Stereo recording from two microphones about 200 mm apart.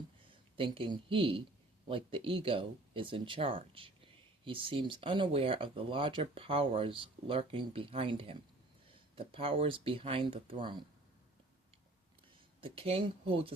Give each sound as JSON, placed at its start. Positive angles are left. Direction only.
{"t": 0.3, "sound": "speech", "side_deg": -25}
{"t": 12.6, "sound": "speech", "side_deg": -30}